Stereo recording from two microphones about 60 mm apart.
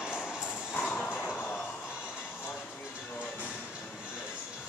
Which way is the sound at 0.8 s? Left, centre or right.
Centre.